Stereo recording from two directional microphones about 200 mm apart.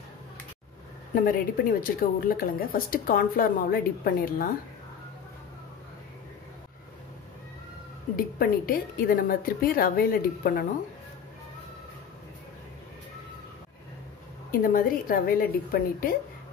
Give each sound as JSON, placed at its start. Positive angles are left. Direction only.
{"t": 1.1, "sound": "a woman's voice", "side_deg": 45}
{"t": 8.2, "sound": "a woman's voice", "side_deg": 45}
{"t": 14.5, "sound": "a woman's voice", "side_deg": 45}